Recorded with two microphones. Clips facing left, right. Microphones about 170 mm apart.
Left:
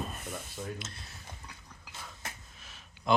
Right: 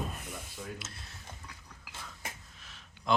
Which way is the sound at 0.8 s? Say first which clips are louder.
Left 3 dB; 5° right (ahead or behind).